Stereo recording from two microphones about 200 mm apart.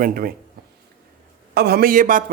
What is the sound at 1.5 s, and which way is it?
Speech, 55° right (ahead or behind).